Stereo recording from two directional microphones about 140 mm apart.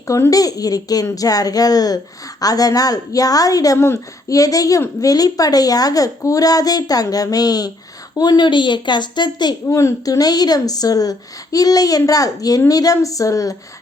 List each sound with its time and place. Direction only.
0.1 s a woman's voice: 25° left (ahead or behind)